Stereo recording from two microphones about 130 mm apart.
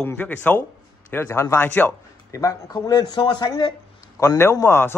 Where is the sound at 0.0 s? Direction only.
15° left (ahead or behind); by 3.7 s 35° left (ahead or behind).